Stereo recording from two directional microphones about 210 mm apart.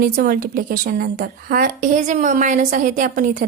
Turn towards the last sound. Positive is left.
turn(degrees=-40)  # may be behind; listen again after turning